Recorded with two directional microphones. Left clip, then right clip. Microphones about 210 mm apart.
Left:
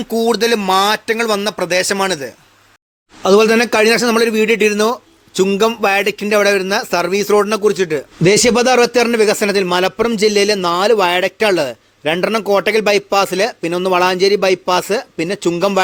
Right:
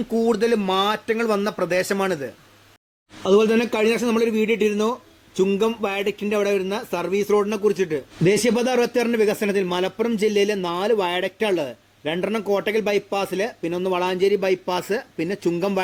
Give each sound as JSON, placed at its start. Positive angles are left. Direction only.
{"t": 0.1, "sound": "speech", "side_deg": 10}
{"t": 3.2, "sound": "speech", "side_deg": 20}